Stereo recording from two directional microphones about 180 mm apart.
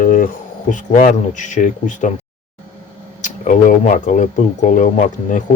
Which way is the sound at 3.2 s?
45° left (ahead or behind).